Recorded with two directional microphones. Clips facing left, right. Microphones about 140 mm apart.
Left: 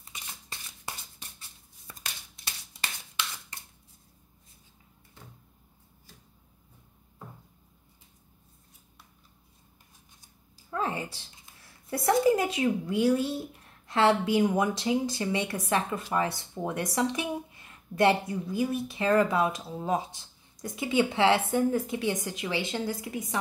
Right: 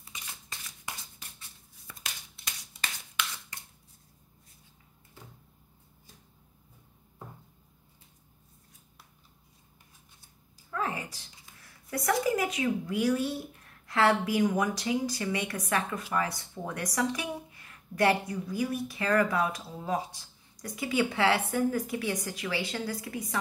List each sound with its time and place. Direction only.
10.7 s a woman's voice: 25° left (ahead or behind)